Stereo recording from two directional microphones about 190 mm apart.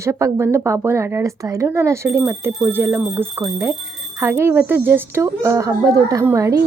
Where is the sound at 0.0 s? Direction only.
15° right (ahead or behind).